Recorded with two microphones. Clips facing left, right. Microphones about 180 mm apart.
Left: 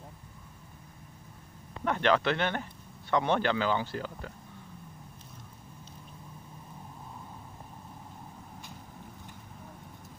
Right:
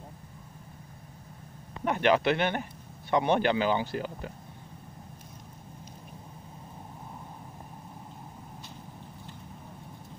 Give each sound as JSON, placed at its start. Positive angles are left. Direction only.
{"t": 1.9, "sound": "speech", "side_deg": -15}